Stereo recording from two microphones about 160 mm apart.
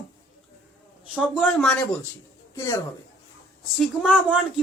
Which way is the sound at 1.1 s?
Centre (ahead or behind).